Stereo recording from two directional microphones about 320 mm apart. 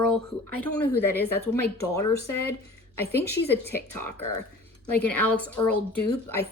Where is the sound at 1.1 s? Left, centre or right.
Centre.